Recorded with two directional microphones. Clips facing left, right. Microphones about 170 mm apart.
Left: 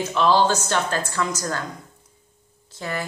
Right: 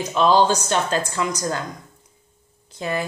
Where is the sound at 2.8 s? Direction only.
20° right (ahead or behind).